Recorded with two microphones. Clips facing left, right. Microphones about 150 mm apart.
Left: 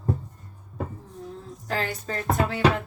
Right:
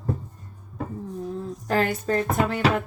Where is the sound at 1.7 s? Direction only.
50° right (ahead or behind).